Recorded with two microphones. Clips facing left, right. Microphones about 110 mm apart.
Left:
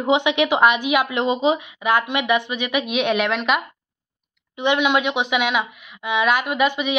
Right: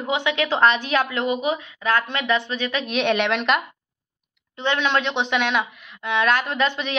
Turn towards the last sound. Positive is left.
turn(degrees=10)  # may be behind; listen again after turning